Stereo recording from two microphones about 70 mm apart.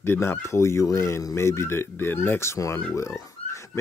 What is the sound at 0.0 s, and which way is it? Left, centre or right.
Speech, left.